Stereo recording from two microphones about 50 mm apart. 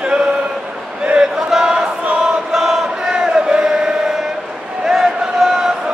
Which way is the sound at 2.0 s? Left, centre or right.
Right.